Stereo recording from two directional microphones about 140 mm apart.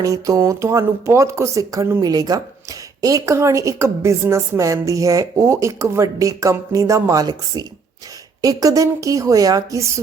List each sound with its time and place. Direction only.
0.0 s speech: 25° right (ahead or behind)